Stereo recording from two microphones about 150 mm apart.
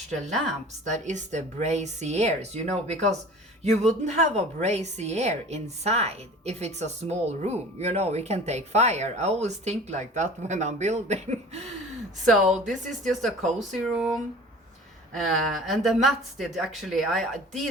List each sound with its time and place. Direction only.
0.9 s a woman's voice: 55° right (ahead or behind)
12.3 s speech: centre (ahead or behind)
12.8 s speech: 55° right (ahead or behind)
13.1 s speech: centre (ahead or behind)